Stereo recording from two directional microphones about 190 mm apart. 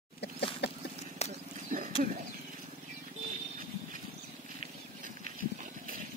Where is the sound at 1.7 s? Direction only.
40° right (ahead or behind).